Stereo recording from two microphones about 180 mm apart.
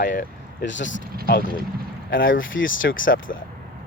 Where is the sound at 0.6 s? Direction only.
90° left.